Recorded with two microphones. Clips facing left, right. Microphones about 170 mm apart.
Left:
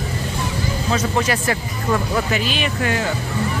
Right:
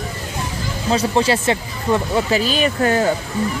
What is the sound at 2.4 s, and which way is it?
Speech, 40° right (ahead or behind).